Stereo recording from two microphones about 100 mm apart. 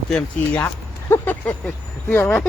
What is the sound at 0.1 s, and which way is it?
Speech, 10° left (ahead or behind).